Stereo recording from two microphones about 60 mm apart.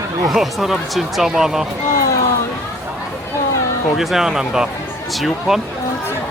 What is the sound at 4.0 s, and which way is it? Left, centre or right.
Speech, centre.